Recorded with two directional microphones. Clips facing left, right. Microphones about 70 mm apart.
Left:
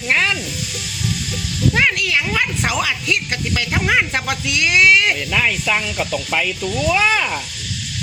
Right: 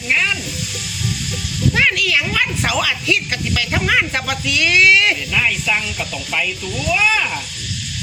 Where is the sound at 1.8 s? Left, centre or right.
Left.